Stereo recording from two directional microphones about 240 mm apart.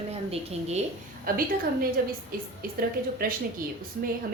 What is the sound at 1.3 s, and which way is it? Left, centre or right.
Speech, right.